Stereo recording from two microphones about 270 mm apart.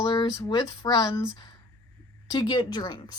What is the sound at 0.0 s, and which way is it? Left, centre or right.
Speech, centre.